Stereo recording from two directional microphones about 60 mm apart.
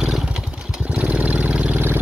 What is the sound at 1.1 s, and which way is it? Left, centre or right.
Vehicle, right.